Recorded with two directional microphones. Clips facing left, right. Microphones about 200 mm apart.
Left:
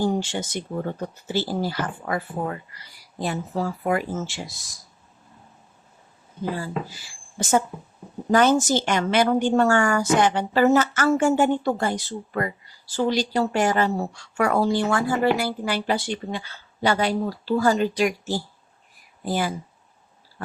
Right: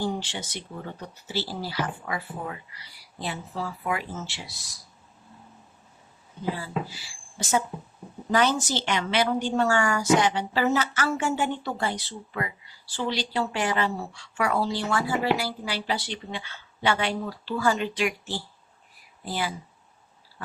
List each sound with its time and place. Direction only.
0.0 s a woman's voice: 45° left (ahead or behind)
6.6 s a woman's voice: 45° left (ahead or behind)